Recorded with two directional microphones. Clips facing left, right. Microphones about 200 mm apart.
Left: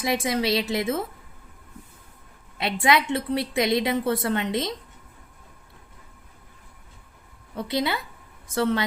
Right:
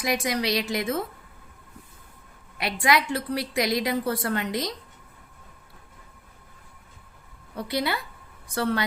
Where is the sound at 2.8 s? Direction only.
25° left (ahead or behind).